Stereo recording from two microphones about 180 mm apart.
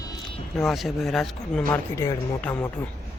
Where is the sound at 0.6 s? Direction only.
Centre (ahead or behind).